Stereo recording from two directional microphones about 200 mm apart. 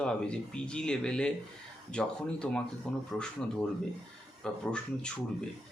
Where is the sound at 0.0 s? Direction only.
5° left (ahead or behind).